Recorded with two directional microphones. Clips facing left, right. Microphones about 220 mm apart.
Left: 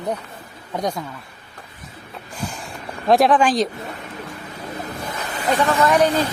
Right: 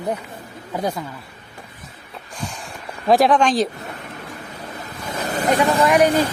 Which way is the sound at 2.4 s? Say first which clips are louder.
Left 2 dB; centre (ahead or behind).